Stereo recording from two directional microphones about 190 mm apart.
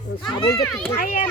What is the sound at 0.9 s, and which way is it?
Speech, 40° left (ahead or behind).